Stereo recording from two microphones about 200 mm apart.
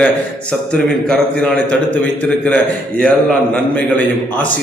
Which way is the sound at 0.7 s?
5° left (ahead or behind).